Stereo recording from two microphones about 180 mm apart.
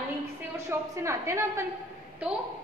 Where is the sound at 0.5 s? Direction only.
15° right (ahead or behind).